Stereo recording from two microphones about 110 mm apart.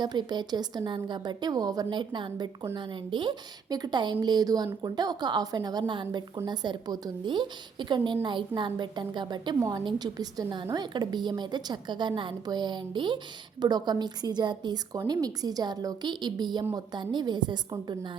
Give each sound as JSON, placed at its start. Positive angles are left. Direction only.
{"t": 0.0, "sound": "a woman's voice", "side_deg": -40}